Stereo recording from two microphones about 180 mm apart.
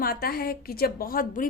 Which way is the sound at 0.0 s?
55° left (ahead or behind).